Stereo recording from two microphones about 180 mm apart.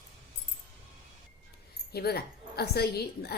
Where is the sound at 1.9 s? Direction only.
60° left (ahead or behind).